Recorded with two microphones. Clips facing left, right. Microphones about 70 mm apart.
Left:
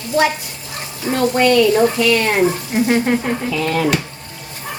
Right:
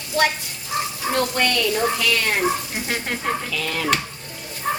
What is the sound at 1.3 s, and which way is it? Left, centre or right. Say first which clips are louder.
Speech: left 9 dB; left.